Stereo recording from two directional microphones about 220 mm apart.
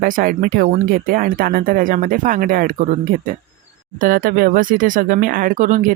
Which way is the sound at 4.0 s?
40° right (ahead or behind).